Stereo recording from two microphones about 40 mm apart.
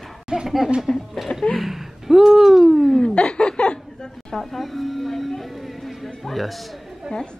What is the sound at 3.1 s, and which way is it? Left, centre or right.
Chuckle, left.